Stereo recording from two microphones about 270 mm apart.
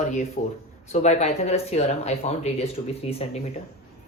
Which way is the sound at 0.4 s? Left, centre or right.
Left.